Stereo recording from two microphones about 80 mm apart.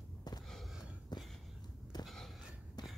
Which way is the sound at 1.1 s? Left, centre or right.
Left.